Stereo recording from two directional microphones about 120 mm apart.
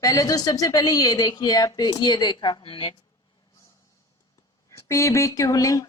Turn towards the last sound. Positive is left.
turn(degrees=30)  # may be behind; listen again after turning